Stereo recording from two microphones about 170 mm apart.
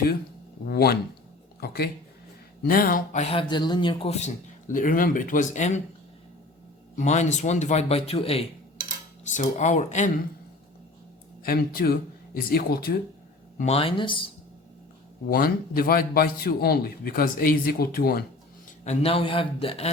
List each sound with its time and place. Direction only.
0.6 s a man's voice: 65° left (ahead or behind); by 4.3 s 35° left (ahead or behind)
4.7 s speech: 50° left (ahead or behind)
6.9 s speech: 45° left (ahead or behind)
9.3 s speech: 45° left (ahead or behind)
11.4 s a man's voice: 60° left (ahead or behind)
13.6 s speech: 35° left (ahead or behind)
15.3 s a man's voice: 60° left (ahead or behind)
18.9 s speech: 35° left (ahead or behind)